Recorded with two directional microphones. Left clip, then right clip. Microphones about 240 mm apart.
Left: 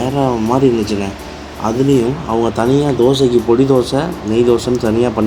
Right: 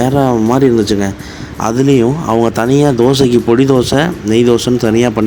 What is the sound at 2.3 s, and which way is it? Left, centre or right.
Speech, right.